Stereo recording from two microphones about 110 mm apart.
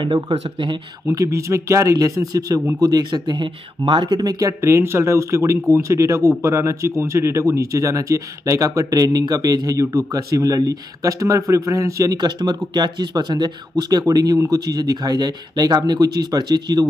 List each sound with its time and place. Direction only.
1.1 s speech: 30° right (ahead or behind)